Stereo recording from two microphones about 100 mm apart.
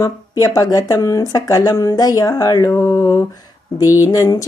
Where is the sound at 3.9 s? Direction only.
35° left (ahead or behind).